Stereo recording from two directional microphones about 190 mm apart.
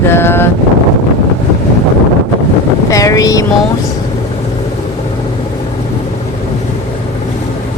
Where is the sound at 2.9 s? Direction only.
15° left (ahead or behind).